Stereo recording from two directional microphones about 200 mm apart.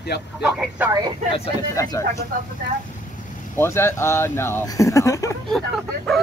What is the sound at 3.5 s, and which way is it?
Speech, 10° left (ahead or behind).